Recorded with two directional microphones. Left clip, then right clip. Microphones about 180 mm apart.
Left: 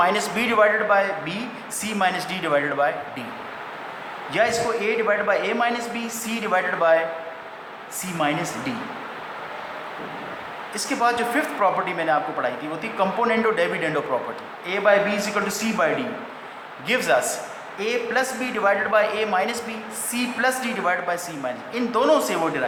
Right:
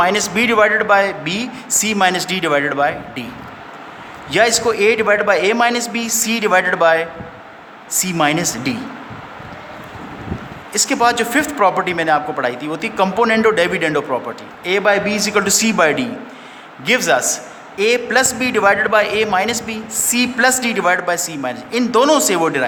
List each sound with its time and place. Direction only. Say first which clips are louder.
0.0 s a man's voice: right 6 dB; 50° right (ahead or behind)
4.3 s a man's voice: right 7 dB; 55° right (ahead or behind)
10.8 s a man's voice: right 7 dB; 55° right (ahead or behind)